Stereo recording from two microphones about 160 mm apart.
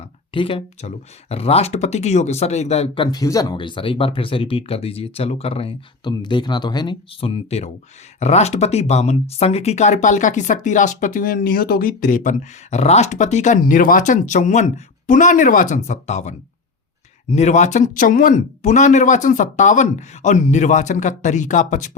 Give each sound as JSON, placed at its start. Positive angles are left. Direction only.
{"t": 0.3, "sound": "speech", "side_deg": 35}
{"t": 17.3, "sound": "speech", "side_deg": 45}